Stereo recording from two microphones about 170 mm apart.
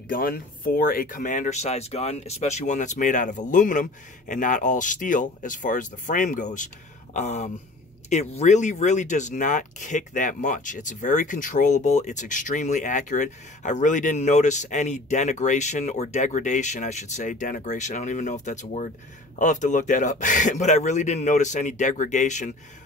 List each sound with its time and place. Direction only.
0.1 s speech: 55° left (ahead or behind)